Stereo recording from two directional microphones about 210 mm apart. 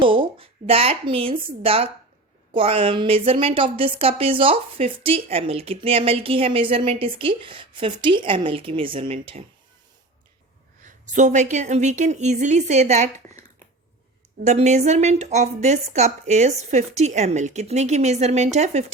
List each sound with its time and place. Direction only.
0.0 s speech: 25° right (ahead or behind)
10.8 s a woman's voice: 35° right (ahead or behind)
14.4 s a woman's voice: 30° right (ahead or behind)